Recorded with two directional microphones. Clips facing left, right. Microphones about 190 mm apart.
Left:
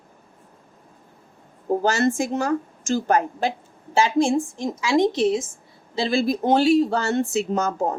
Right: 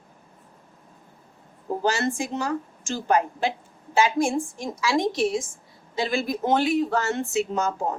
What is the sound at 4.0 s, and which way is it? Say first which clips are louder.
A woman's voice: left 3 dB; 30° left (ahead or behind).